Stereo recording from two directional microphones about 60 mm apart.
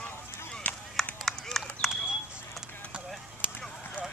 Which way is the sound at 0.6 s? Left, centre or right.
Left.